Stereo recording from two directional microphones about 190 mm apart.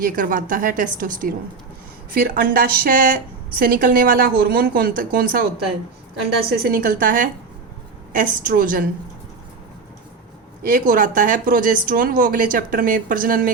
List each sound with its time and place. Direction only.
0.0 s a woman's voice: 45° right (ahead or behind)
6.5 s a woman's voice: 50° right (ahead or behind)
10.7 s a woman's voice: 45° right (ahead or behind)